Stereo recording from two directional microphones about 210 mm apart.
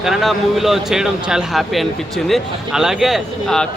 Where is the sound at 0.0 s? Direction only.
Centre (ahead or behind).